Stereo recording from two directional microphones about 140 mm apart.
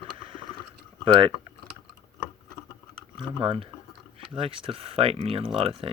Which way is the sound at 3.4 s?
40° right (ahead or behind).